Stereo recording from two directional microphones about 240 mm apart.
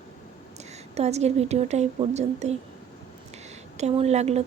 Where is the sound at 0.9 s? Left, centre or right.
Right.